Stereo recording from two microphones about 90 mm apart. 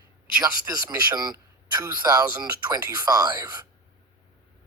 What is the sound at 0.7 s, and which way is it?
Speech, 50° right (ahead or behind).